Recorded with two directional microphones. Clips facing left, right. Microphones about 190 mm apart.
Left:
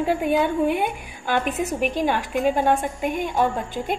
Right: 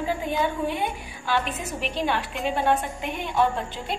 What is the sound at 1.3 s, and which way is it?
A woman's voice, 50° left (ahead or behind).